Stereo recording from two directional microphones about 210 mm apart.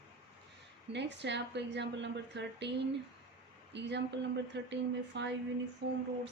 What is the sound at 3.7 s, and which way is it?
Speech, 55° right (ahead or behind).